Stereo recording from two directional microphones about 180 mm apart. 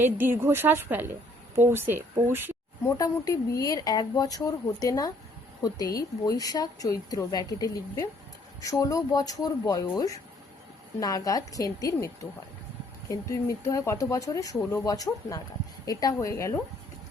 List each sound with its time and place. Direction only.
0.0 s a woman's voice: 10° right (ahead or behind)
2.8 s a woman's voice: 20° left (ahead or behind)